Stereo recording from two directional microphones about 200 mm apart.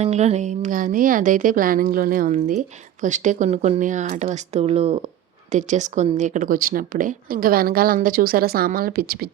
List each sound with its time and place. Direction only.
0.0 s a woman's voice: 35° right (ahead or behind); by 9.3 s 50° right (ahead or behind)